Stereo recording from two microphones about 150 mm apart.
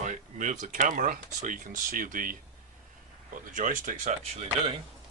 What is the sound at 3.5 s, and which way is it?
Speech, 60° right (ahead or behind).